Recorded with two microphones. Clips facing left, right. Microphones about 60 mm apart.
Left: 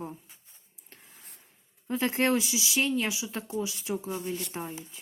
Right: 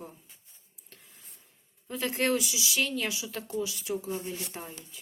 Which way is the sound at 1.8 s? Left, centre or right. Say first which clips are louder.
Left 3 dB; left.